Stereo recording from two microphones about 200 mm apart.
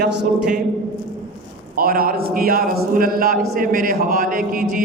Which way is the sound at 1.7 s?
45° right (ahead or behind).